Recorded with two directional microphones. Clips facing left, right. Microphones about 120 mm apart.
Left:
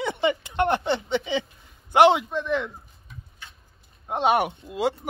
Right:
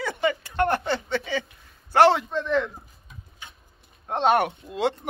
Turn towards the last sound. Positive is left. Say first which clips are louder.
# even
turn(degrees=5)  # may be behind; listen again after turning